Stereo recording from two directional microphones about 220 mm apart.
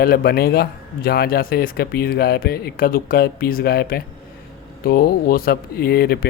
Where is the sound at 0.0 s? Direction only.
45° left (ahead or behind).